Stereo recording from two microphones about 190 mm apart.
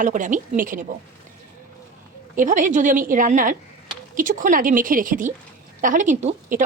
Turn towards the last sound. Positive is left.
turn(degrees=-40)  # may be behind; listen again after turning